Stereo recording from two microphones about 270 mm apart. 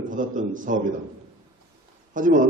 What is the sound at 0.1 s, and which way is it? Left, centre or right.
Speech, right.